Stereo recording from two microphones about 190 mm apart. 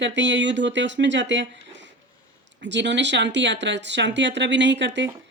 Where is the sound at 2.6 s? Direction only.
70° right (ahead or behind).